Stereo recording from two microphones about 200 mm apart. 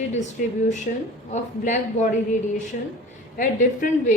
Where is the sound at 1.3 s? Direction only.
40° left (ahead or behind).